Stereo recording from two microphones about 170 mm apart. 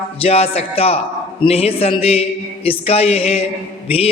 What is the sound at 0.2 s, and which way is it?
A man's voice, 35° left (ahead or behind).